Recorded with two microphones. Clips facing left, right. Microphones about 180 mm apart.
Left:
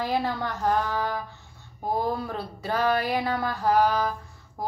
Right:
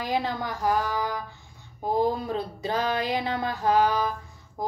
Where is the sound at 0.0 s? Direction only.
15° right (ahead or behind).